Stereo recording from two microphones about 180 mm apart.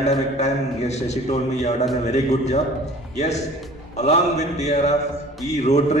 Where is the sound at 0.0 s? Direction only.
35° left (ahead or behind).